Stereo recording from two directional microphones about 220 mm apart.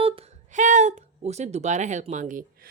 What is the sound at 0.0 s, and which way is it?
Speech, 30° right (ahead or behind).